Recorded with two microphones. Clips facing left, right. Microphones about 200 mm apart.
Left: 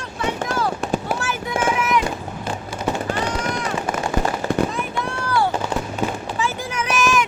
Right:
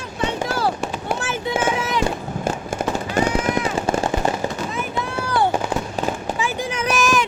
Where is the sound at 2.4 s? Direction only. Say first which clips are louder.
Right 6 dB; 50° right (ahead or behind).